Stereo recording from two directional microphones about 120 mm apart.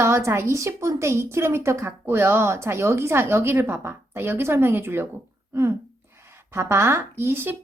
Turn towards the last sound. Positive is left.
turn(degrees=-15)  # may be behind; listen again after turning